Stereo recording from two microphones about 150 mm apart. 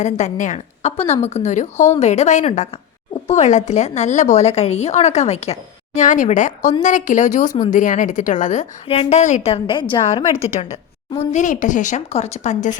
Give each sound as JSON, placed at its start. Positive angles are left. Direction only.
{"t": 0.0, "sound": "a woman's voice", "side_deg": 50}